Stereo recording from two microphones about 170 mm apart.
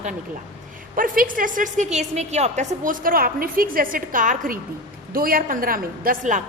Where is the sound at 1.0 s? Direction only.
55° right (ahead or behind).